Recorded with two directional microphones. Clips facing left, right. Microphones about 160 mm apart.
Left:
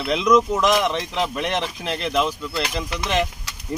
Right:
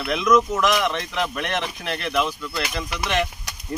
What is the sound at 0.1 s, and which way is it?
Speech, 25° left (ahead or behind).